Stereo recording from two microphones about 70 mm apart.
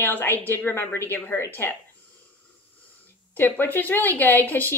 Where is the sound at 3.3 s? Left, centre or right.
Left.